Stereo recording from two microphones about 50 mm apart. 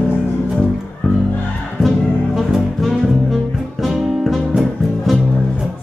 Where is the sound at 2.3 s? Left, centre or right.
Centre.